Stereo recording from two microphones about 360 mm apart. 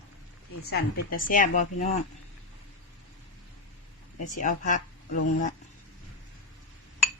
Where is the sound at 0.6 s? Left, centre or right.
Left.